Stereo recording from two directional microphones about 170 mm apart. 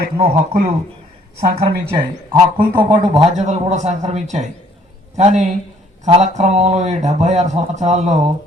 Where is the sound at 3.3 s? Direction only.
45° right (ahead or behind).